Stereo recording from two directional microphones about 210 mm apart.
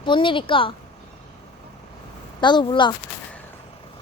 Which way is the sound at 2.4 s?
20° left (ahead or behind).